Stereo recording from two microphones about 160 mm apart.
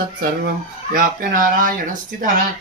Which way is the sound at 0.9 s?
60° right (ahead or behind).